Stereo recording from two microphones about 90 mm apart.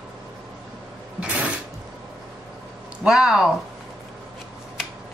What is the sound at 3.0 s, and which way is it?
Speech, 5° right (ahead or behind).